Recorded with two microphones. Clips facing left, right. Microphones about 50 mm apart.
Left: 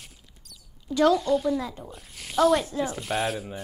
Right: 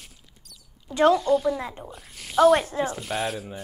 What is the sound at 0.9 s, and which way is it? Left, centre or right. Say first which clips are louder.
Speech: right 2 dB; right.